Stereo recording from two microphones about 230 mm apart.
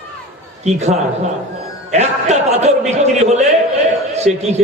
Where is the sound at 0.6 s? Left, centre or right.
Right.